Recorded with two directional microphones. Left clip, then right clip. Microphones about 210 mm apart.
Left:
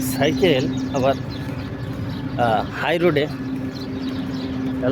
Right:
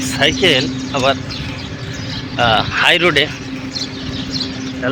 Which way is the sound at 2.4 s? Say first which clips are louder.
Right 7 dB; 5° left (ahead or behind).